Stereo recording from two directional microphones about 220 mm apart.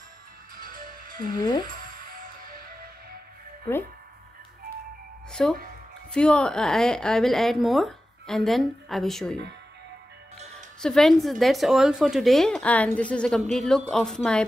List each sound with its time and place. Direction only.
0.6 s music: 40° right (ahead or behind)
1.3 s speech: 20° left (ahead or behind)
1.7 s music: 40° right (ahead or behind)
5.3 s speech: 5° left (ahead or behind)
10.8 s speech: centre (ahead or behind)